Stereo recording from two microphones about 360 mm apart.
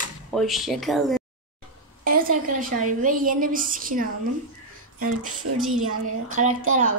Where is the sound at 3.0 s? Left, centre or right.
Right.